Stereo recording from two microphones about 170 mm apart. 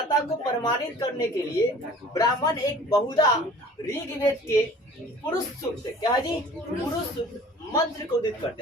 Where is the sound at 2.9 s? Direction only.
25° left (ahead or behind).